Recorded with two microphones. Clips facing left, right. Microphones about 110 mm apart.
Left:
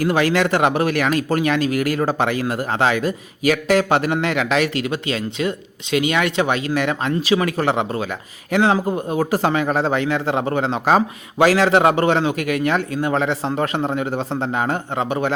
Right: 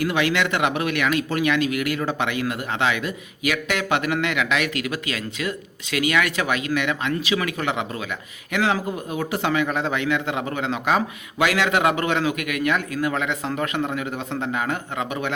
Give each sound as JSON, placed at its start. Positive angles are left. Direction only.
{"t": 0.0, "sound": "speech", "side_deg": 40}